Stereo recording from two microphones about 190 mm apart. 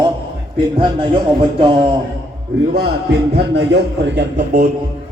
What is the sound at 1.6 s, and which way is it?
Speech, 25° right (ahead or behind).